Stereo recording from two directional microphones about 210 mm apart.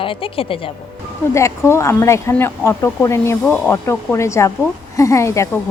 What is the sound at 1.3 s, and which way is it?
Speech, 15° left (ahead or behind).